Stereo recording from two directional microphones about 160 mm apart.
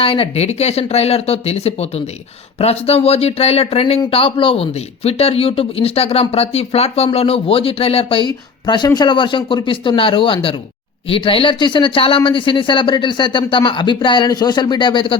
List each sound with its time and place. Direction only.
0.0 s speech: 35° left (ahead or behind)